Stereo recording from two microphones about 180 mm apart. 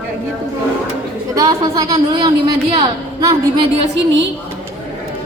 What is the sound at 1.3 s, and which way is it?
A woman's voice, 20° right (ahead or behind).